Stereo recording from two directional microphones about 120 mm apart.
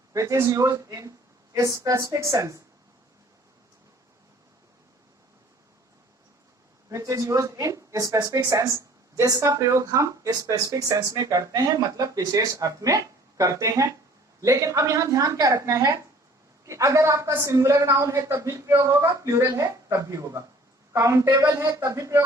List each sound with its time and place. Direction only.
0.1 s speech: 25° right (ahead or behind)
6.9 s speech: 25° right (ahead or behind)